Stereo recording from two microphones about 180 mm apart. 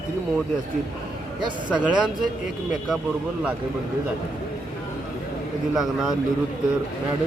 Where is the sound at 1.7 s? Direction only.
5° right (ahead or behind).